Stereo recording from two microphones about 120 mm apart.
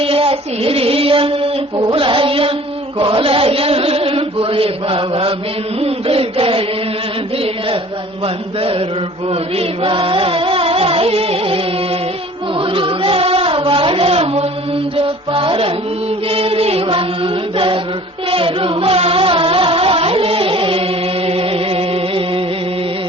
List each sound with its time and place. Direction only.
0.0 s music: 50° right (ahead or behind)
3.0 s chant: 50° right (ahead or behind)
5.8 s music: 55° right (ahead or behind)
9.3 s music: 50° right (ahead or behind)
12.5 s a sound: 45° right (ahead or behind)
14.9 s music: 50° right (ahead or behind)